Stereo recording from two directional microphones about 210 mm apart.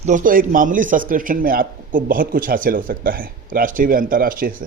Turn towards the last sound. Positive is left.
turn(degrees=-40)  # may be behind; listen again after turning